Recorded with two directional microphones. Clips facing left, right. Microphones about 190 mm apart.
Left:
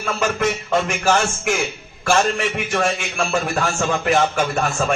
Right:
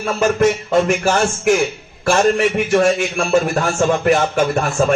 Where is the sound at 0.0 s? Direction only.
40° right (ahead or behind).